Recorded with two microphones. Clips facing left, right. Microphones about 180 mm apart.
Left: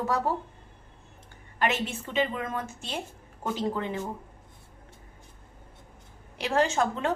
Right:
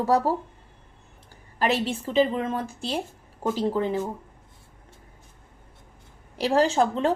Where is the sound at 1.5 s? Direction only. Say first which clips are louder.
Right 4 dB; 35° right (ahead or behind).